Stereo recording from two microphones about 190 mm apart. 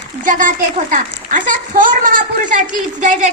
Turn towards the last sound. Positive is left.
turn(degrees=-40)  # may be behind; listen again after turning